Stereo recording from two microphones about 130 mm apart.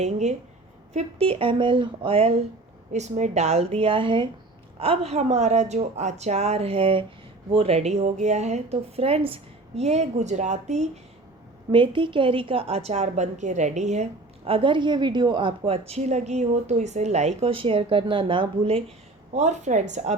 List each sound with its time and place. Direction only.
0.0 s speech: 60° right (ahead or behind)
0.9 s a woman's voice: 45° right (ahead or behind)
2.9 s a woman's voice: 65° right (ahead or behind); by 4.3 s 40° right (ahead or behind)
4.8 s speech: 50° right (ahead or behind)
11.7 s a woman's voice: 40° right (ahead or behind)
15.9 s speech: 60° right (ahead or behind); by 18.8 s 40° right (ahead or behind)
19.3 s speech: 65° right (ahead or behind)